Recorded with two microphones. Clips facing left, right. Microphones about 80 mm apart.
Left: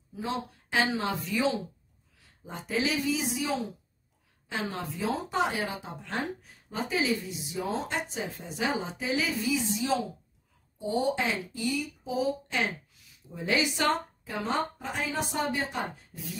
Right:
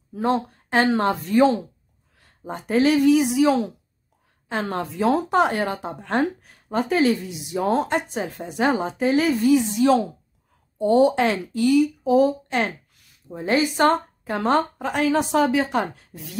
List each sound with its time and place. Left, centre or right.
0.1 s a woman's voice: right
4.5 s speech: right